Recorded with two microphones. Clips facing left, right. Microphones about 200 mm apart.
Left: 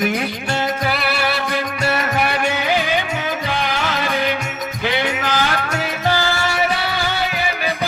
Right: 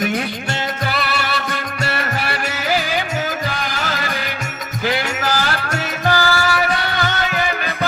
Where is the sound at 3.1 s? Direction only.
40° right (ahead or behind).